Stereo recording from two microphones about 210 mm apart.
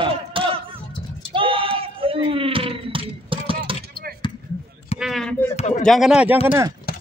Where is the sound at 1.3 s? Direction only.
25° right (ahead or behind).